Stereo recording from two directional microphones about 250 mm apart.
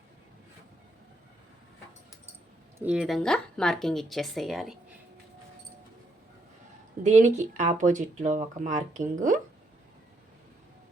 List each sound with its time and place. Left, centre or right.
2.7 s speech: centre
7.0 s speech: right